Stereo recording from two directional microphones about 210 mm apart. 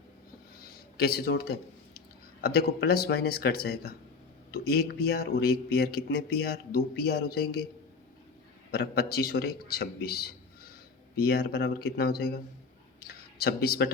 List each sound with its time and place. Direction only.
0.9 s speech: 50° left (ahead or behind)
8.7 s speech: 50° left (ahead or behind)
13.0 s a sound: 45° left (ahead or behind)